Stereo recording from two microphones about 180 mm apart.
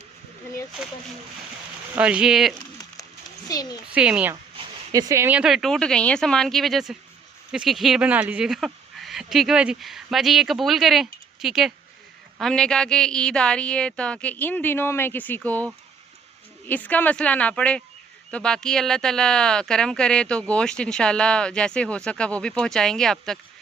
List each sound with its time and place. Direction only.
2.0 s speech: 5° right (ahead or behind)
3.5 s speech: 20° left (ahead or behind)
3.9 s speech: 5° right (ahead or behind)
4.9 s a woman's voice: 20° right (ahead or behind); by 23.4 s centre (ahead or behind)